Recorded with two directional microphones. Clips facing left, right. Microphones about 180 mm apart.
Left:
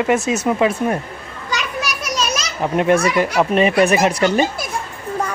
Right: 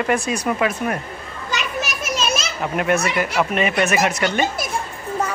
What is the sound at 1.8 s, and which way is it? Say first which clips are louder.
Children playing: left 1 dB; 25° right (ahead or behind).